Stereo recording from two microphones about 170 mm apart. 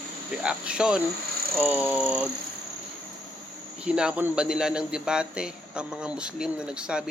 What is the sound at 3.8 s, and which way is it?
A man's voice, 5° right (ahead or behind).